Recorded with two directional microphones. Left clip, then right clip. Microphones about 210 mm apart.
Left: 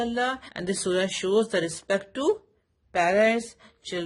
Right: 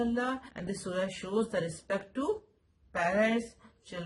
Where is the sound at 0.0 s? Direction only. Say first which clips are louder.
Left 6 dB; 40° left (ahead or behind).